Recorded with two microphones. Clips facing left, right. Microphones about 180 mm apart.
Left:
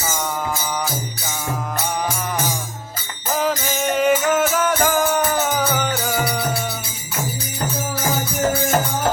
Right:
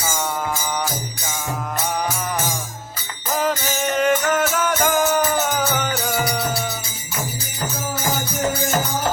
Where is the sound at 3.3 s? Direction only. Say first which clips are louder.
Left 1 dB; centre (ahead or behind).